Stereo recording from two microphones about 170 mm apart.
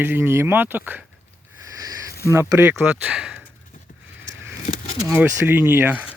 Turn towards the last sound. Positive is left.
turn(degrees=-10)  # may be behind; listen again after turning